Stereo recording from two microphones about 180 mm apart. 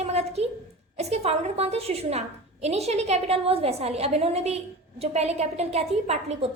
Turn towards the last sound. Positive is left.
turn(degrees=-35)  # may be behind; listen again after turning